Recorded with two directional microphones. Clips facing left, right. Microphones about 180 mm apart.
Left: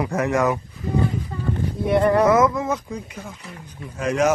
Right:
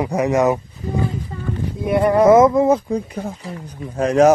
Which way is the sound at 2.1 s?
25° right (ahead or behind).